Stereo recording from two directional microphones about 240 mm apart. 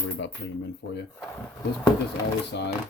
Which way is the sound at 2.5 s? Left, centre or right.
Left.